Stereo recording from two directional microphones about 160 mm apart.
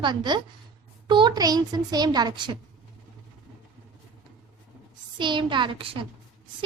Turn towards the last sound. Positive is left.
turn(degrees=-35)  # may be behind; listen again after turning